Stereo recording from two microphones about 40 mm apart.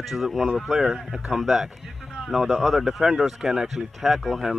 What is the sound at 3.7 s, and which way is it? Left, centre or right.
Speech, centre.